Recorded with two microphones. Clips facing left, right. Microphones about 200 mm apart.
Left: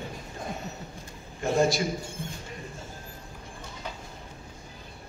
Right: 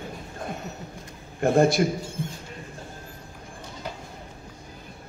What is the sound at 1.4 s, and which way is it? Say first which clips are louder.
Speech: right 5 dB; 55° right (ahead or behind).